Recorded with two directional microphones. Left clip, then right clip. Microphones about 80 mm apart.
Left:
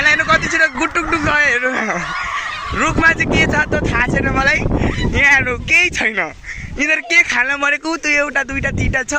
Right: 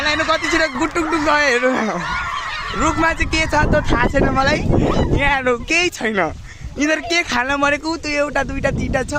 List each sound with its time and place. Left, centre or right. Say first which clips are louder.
0.0 s a sound: left 5 dB; centre
0.3 s speech: left 3 dB; right
4.4 s speech: left 1 dB; right
5.5 s speech: left 3 dB; right
8.0 s speech: left 6 dB; centre